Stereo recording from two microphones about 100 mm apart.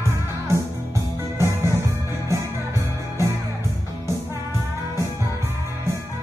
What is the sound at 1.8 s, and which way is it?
Music, 30° right (ahead or behind).